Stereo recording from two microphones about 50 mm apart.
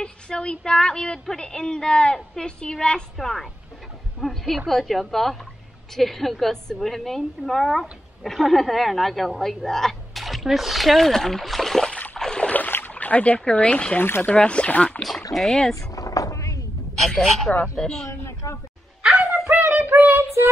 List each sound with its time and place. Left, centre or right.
0.0 s a woman's voice: centre
3.2 s a woman's voice: centre
12.2 s a sound: centre
12.4 s a sound: left
13.6 s speech: left
13.9 s speech: left
14.2 s speech: left
15.3 s a woman's voice: centre
16.3 s a sound: left
17.1 s speech: centre
18.0 s a sound: left
19.0 s dog: centre
19.5 s child singing: right